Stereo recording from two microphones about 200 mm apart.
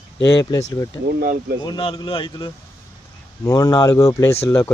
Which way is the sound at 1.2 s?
45° right (ahead or behind).